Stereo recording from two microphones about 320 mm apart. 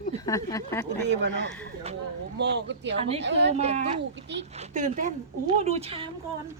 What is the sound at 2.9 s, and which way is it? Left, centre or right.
Speech, centre.